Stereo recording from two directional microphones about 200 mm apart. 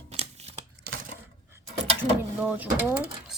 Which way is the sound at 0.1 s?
30° right (ahead or behind).